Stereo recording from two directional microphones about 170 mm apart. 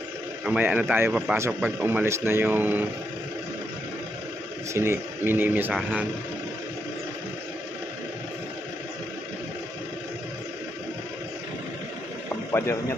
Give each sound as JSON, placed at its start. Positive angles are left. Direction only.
{"t": 0.4, "sound": "speech", "side_deg": -10}
{"t": 4.7, "sound": "speech", "side_deg": -15}
{"t": 12.5, "sound": "speech", "side_deg": 15}